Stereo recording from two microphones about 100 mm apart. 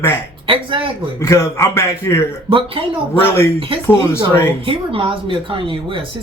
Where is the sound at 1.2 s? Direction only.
30° left (ahead or behind).